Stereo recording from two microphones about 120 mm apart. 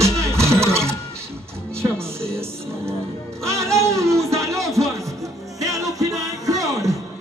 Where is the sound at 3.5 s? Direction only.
25° right (ahead or behind).